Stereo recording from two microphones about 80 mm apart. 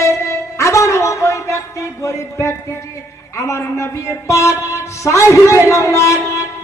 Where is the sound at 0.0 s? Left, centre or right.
Left.